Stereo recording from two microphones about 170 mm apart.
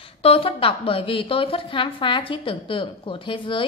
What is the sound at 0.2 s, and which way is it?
A woman's voice, 35° left (ahead or behind).